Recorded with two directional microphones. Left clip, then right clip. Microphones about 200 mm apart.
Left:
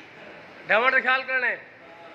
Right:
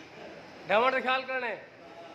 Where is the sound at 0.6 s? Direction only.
5° right (ahead or behind).